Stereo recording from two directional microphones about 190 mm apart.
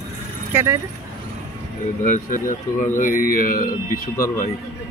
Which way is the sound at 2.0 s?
45° left (ahead or behind).